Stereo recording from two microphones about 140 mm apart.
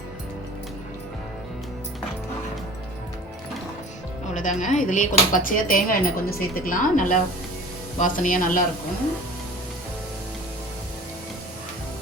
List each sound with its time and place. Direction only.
4.4 s speech: 60° left (ahead or behind)